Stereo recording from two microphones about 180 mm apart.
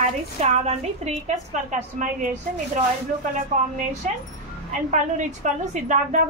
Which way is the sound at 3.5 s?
45° right (ahead or behind).